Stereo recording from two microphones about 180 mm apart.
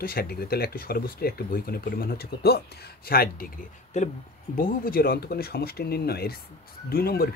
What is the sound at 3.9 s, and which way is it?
Speech, 40° left (ahead or behind).